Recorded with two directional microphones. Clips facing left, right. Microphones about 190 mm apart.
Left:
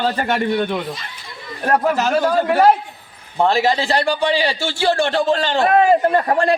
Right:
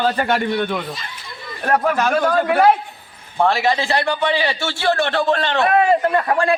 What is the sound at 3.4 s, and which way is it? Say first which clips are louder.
A man's voice: left 1 dB; 35° left (ahead or behind).